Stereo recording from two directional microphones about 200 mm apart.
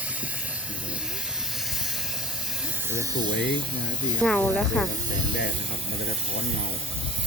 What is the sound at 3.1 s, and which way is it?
Speech, 55° left (ahead or behind).